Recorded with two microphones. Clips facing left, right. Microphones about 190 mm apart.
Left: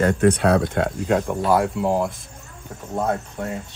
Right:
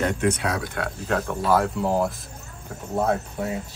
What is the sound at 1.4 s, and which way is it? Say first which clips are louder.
Speech: left 2 dB; centre (ahead or behind).